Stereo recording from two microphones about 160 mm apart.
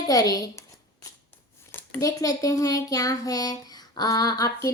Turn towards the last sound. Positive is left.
turn(degrees=20)  # may be behind; listen again after turning